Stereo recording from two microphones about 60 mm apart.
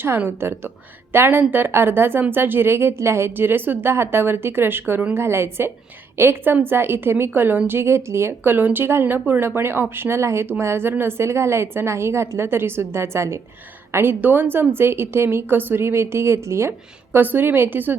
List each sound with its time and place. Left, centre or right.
0.3 s a woman's voice: right
8.5 s a woman's voice: right
13.9 s a woman's voice: right
17.2 s a woman's voice: right